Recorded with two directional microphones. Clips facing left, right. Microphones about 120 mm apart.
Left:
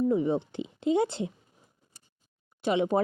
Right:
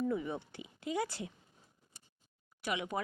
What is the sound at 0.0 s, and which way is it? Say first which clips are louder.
Speech: left 10 dB; 25° left (ahead or behind).